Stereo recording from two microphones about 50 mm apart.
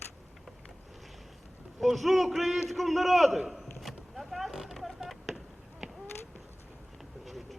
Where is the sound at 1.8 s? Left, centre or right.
Centre.